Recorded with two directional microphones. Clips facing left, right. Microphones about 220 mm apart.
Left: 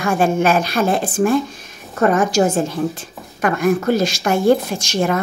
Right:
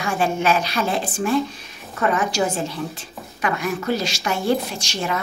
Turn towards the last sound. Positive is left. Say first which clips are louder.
# left 7 dB
turn(degrees=50)  # may be behind; listen again after turning